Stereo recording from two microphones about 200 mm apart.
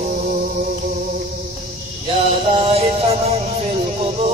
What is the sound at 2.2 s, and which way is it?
Music, 30° right (ahead or behind).